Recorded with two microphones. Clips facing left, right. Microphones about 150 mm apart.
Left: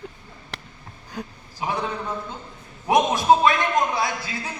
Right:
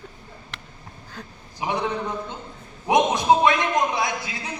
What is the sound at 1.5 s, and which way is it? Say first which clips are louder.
Speech: right 1 dB; 20° right (ahead or behind).